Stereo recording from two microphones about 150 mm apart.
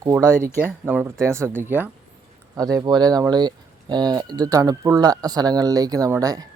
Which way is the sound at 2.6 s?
25° right (ahead or behind).